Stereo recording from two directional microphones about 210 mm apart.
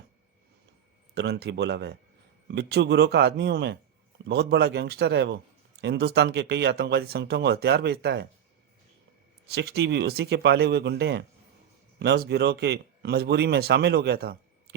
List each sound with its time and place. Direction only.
1.1 s speech: 55° right (ahead or behind)
9.5 s speech: 50° right (ahead or behind)